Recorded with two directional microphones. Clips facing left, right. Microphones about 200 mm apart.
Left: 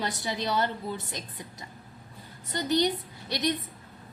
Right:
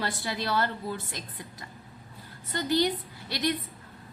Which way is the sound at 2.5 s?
20° left (ahead or behind).